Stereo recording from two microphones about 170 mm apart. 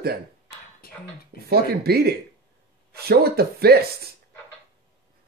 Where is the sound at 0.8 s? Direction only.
60° left (ahead or behind).